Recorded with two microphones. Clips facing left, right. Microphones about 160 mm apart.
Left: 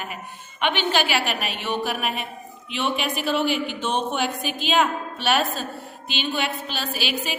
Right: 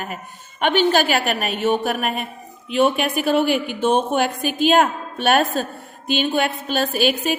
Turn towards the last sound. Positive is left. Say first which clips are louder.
# right 8 dB
turn(degrees=-50)  # may be behind; listen again after turning